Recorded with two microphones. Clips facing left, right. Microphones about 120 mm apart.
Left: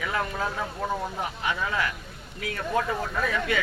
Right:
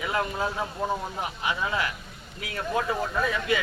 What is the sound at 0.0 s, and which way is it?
Speech, 20° right (ahead or behind).